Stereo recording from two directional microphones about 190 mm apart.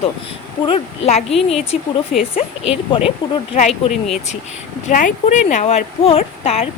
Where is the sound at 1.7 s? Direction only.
5° right (ahead or behind).